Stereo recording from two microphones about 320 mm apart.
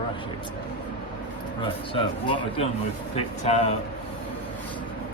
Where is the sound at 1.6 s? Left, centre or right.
Centre.